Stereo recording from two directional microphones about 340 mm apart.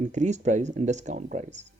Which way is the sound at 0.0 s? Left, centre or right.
Right.